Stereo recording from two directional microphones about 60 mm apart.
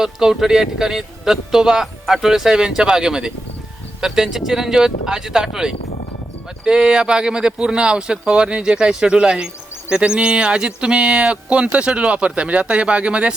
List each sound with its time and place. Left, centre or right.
0.0 s speech: centre